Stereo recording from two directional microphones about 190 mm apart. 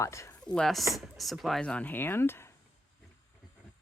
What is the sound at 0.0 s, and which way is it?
Speech, 15° left (ahead or behind).